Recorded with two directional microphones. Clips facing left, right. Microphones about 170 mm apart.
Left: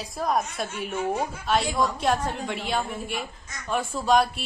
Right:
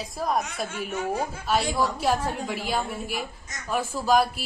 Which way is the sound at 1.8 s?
5° right (ahead or behind).